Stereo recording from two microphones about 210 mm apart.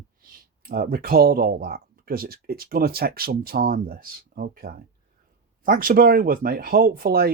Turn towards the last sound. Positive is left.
turn(degrees=-45)  # may be behind; listen again after turning